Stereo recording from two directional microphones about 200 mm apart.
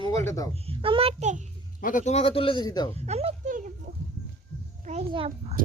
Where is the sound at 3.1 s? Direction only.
30° right (ahead or behind).